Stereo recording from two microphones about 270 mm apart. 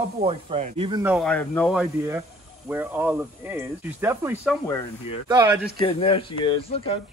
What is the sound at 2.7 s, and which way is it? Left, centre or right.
Speech, centre.